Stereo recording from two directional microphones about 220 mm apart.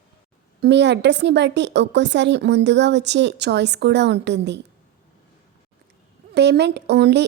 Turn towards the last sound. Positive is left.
turn(degrees=-50)  # may be behind; listen again after turning